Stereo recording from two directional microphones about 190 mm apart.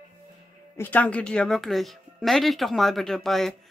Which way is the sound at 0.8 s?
10° left (ahead or behind).